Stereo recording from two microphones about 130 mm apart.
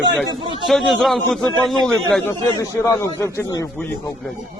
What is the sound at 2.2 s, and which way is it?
A man's voice, 25° left (ahead or behind).